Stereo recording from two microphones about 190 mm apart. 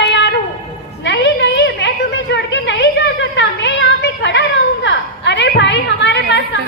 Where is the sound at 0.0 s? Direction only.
65° left (ahead or behind).